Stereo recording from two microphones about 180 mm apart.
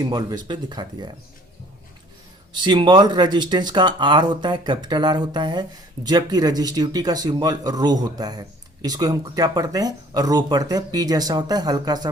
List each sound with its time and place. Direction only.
0.0 s speech: 20° right (ahead or behind)
2.5 s speech: 25° right (ahead or behind)